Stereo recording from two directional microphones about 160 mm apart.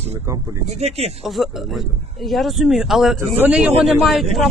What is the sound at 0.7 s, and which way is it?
Speech, 40° right (ahead or behind).